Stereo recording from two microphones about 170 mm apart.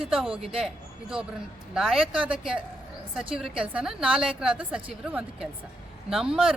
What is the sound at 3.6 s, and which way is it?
A woman's voice, 5° right (ahead or behind).